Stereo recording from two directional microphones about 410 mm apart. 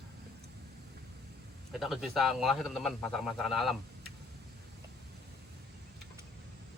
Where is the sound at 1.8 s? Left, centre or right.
Centre.